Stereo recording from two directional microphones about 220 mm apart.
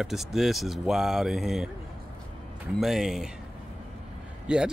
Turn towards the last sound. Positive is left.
turn(degrees=-5)  # may be behind; listen again after turning